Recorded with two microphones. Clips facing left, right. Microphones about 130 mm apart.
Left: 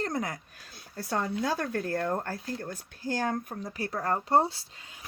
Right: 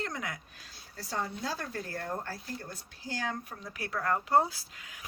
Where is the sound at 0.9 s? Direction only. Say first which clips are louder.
Left 6 dB; 65° left (ahead or behind).